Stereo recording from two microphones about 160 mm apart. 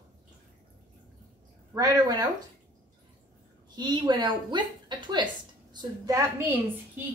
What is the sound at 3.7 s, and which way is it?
A woman's voice, 25° right (ahead or behind).